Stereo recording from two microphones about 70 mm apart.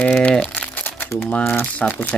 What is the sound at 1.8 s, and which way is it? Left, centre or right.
Speech, centre.